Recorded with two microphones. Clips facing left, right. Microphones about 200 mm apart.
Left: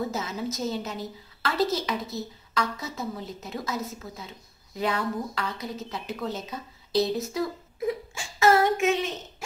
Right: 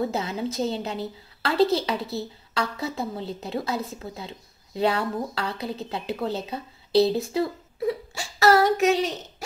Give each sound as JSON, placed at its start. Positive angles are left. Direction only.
{"t": 0.1, "sound": "a woman's voice", "side_deg": -30}